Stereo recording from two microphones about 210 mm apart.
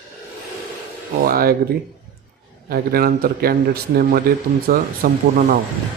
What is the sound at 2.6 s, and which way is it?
A man's voice, 45° right (ahead or behind).